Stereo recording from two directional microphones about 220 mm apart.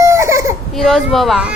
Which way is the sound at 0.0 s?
10° right (ahead or behind).